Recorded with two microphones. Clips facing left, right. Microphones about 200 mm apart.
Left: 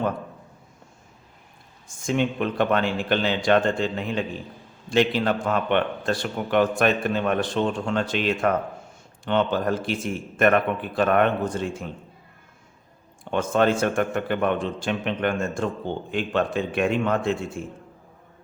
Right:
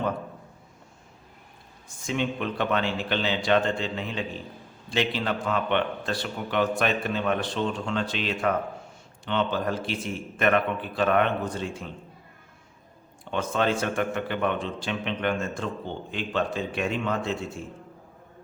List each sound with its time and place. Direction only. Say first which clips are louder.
2.0 s a man's voice: left 4 dB; 50° left (ahead or behind)
13.3 s a man's voice: left 5 dB; 50° left (ahead or behind)